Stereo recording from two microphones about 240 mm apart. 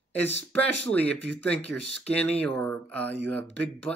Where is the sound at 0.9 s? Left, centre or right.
Centre.